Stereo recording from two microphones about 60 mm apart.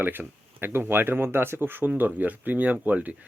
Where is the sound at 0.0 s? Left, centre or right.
Right.